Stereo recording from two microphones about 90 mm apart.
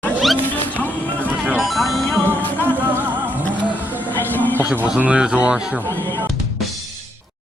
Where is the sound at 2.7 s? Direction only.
20° right (ahead or behind).